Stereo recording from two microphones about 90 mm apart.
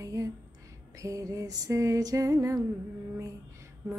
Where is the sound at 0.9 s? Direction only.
35° right (ahead or behind).